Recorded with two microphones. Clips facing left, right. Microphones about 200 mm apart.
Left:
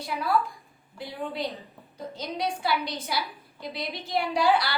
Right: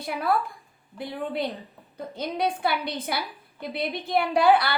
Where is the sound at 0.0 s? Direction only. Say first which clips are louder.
Right 1 dB; 55° right (ahead or behind).